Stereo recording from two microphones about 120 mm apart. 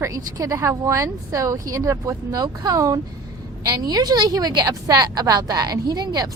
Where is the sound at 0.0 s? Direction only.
30° right (ahead or behind).